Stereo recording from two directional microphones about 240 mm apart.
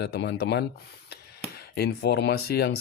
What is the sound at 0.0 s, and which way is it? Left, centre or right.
Speech, left.